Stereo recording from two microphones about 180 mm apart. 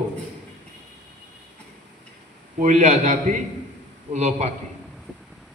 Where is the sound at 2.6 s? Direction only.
40° right (ahead or behind).